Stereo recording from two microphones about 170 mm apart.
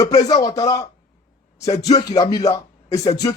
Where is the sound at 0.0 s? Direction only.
25° left (ahead or behind).